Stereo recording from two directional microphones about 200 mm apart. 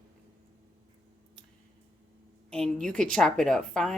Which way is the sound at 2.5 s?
5° left (ahead or behind).